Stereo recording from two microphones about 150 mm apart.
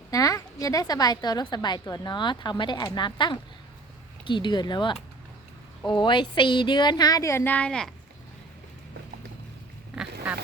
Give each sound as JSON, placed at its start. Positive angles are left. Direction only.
{"t": 0.1, "sound": "a woman's voice", "side_deg": 25}